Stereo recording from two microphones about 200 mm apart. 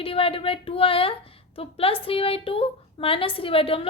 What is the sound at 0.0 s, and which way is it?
A woman's voice, 25° left (ahead or behind).